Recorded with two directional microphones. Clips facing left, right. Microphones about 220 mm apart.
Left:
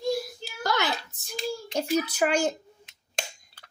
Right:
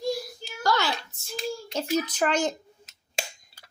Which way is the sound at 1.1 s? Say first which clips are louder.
Right 2 dB; 20° left (ahead or behind).